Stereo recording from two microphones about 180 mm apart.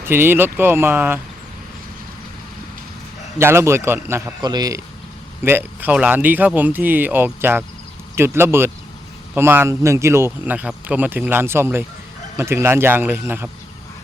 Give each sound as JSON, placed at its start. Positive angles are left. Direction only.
{"t": 0.0, "sound": "speech", "side_deg": -10}
{"t": 3.3, "sound": "a man's voice", "side_deg": -15}
{"t": 5.5, "sound": "speech", "side_deg": -10}